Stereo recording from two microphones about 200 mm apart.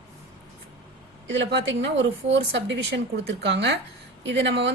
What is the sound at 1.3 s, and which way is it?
Speech, 65° right (ahead or behind).